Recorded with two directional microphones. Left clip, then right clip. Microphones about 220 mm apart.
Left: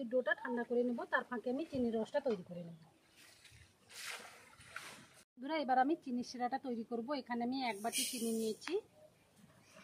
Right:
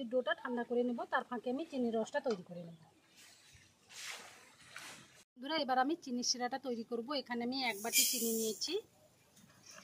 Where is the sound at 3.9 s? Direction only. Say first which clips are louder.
Right 1 dB; 45° left (ahead or behind).